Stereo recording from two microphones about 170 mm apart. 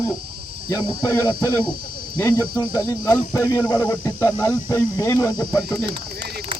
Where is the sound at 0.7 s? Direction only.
25° left (ahead or behind).